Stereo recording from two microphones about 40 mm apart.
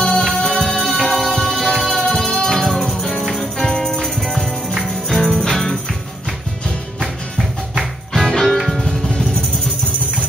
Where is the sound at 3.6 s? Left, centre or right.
Centre.